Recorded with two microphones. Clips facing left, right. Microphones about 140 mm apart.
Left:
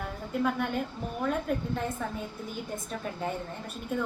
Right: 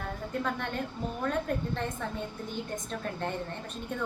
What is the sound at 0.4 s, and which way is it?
A woman's voice, 5° left (ahead or behind).